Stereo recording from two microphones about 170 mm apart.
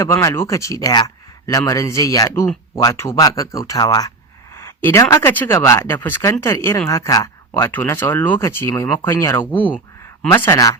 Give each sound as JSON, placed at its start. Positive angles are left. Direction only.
{"t": 0.0, "sound": "speech", "side_deg": 15}